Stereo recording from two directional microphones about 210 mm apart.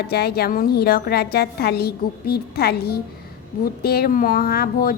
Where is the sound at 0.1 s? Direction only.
50° left (ahead or behind).